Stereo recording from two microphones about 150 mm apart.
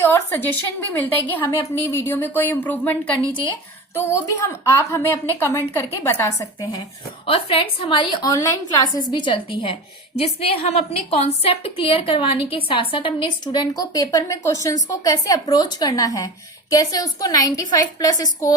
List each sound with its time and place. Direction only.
0.1 s a woman's voice: 15° left (ahead or behind)
6.6 s a woman's voice: 25° left (ahead or behind)
7.3 s a woman's voice: 40° left (ahead or behind)